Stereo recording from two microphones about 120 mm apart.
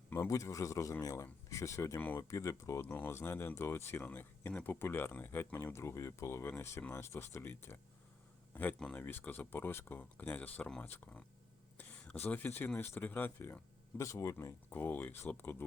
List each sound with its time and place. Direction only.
0.1 s speech: 25° left (ahead or behind)
11.8 s a sound: 15° left (ahead or behind)
12.2 s speech: 15° left (ahead or behind)